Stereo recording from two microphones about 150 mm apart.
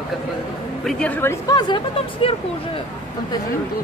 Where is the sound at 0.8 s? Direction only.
10° left (ahead or behind); by 2.3 s 30° left (ahead or behind).